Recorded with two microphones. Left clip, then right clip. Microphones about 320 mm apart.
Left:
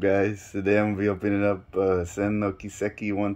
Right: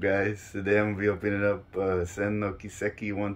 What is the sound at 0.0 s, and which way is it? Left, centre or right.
Speech, left.